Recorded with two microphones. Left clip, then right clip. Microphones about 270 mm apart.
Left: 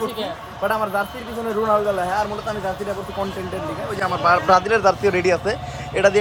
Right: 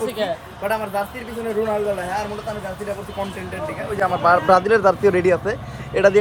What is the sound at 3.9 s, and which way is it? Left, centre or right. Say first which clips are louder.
Speech: right 2 dB; centre.